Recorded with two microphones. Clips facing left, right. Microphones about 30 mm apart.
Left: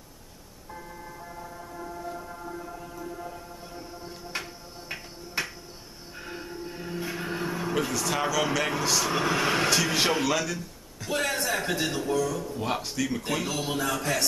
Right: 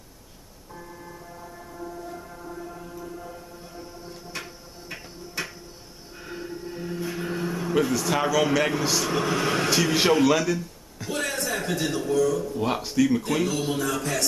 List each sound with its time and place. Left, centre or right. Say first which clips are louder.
1.8 s music: even; centre
5.4 s music: left 1 dB; centre
7.7 s a man's voice: right 6 dB; centre
9.1 s a man's voice: right 1 dB; centre
9.7 s speech: right 3 dB; centre
11.1 s a man's voice: left 1 dB; centre
12.5 s a man's voice: right 6 dB; centre